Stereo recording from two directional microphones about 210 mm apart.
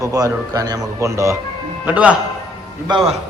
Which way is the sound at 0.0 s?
15° right (ahead or behind).